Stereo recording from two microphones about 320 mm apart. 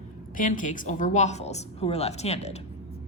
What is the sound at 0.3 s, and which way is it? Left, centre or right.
A woman's voice, left.